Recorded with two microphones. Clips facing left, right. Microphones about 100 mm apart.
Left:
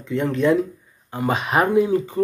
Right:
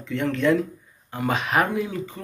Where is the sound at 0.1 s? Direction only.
25° left (ahead or behind).